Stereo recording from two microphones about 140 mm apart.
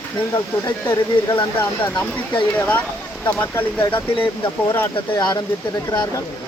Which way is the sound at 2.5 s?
10° left (ahead or behind).